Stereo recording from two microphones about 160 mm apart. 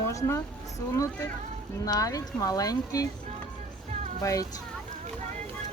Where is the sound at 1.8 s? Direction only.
20° left (ahead or behind).